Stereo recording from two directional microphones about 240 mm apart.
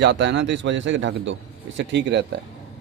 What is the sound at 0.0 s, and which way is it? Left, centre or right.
A man's voice, right.